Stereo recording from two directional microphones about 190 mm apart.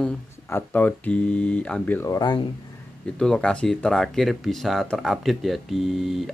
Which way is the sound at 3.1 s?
5° left (ahead or behind).